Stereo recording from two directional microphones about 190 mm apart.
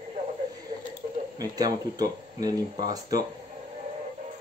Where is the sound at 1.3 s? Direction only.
20° right (ahead or behind).